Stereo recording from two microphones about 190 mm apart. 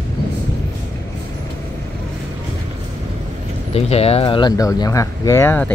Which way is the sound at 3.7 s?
30° left (ahead or behind).